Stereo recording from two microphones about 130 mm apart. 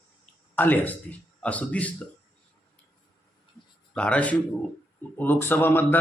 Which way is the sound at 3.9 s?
10° left (ahead or behind).